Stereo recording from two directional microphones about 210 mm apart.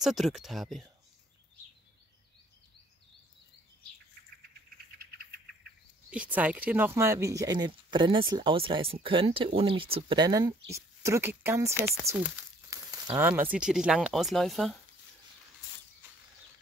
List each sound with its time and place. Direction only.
0.0 s speech: centre (ahead or behind)
6.0 s speech: 5° right (ahead or behind)